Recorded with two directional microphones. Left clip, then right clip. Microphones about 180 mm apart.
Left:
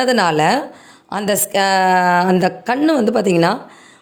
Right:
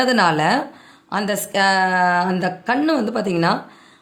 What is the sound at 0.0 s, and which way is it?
Speech, 35° left (ahead or behind).